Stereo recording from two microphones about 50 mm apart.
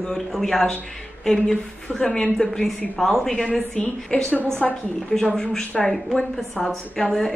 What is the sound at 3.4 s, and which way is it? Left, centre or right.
Speech, left.